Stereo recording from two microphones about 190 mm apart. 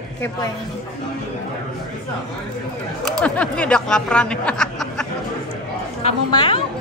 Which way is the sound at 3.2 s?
5° left (ahead or behind).